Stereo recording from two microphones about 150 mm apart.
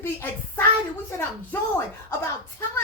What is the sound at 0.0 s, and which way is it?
Speech, 15° left (ahead or behind).